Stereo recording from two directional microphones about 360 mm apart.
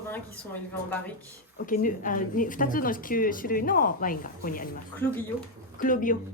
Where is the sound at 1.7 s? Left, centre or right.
Left.